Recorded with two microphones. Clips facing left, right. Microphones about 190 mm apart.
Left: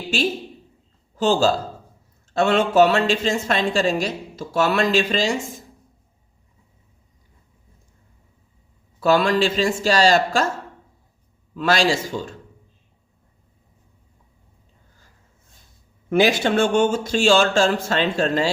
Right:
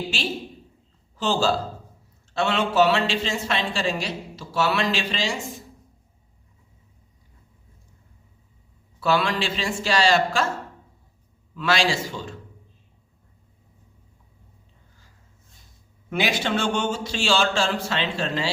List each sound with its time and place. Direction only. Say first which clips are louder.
1.1 s a man's voice: left 4 dB; 45° left (ahead or behind)
9.0 s speech: left 6 dB; 45° left (ahead or behind)
11.5 s speech: left 4 dB; 45° left (ahead or behind)
16.0 s speech: left 7 dB; 45° left (ahead or behind)